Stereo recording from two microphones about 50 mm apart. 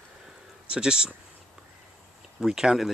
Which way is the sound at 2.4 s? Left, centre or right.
Centre.